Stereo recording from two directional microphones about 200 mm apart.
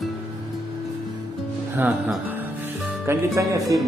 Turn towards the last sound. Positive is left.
turn(degrees=-15)  # may be behind; listen again after turning